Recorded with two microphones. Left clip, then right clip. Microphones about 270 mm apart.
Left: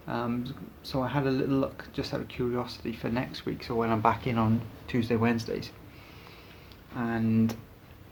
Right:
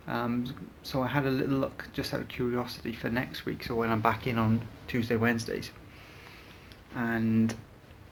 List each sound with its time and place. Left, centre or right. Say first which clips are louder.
0.0 s speech: even; centre
6.9 s speech: even; centre